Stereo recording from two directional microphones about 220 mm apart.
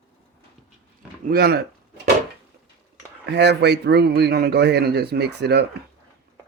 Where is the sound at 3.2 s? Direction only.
50° right (ahead or behind).